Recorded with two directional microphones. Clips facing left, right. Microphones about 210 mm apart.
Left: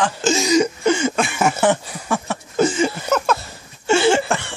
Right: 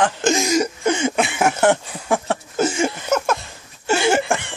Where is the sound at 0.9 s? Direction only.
20° right (ahead or behind).